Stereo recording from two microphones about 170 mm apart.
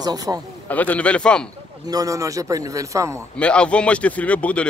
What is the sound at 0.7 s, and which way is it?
Speech, 10° left (ahead or behind).